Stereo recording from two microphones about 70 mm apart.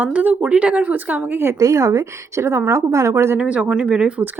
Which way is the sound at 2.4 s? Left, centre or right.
Right.